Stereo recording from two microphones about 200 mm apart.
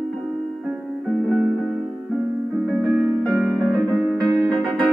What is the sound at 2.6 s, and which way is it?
Music, centre (ahead or behind).